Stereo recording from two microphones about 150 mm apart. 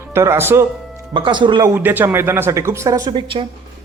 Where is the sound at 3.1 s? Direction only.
35° right (ahead or behind).